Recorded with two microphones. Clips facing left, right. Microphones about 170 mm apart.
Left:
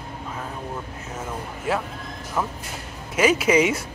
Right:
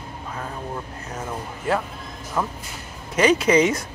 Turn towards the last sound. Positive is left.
turn(degrees=5)  # may be behind; listen again after turning